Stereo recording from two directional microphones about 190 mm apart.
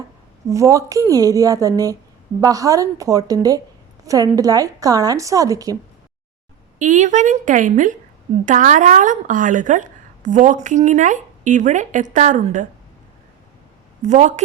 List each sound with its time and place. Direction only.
0.4 s a woman's voice: 15° right (ahead or behind)
6.7 s a woman's voice: 40° right (ahead or behind)
14.0 s a woman's voice: 40° right (ahead or behind)